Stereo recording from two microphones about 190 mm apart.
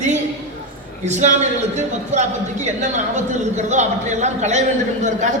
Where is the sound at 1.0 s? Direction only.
40° right (ahead or behind).